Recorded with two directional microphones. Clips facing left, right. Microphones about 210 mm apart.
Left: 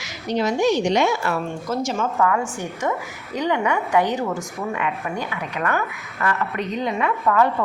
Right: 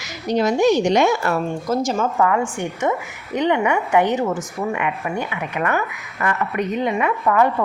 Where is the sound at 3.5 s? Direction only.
15° right (ahead or behind).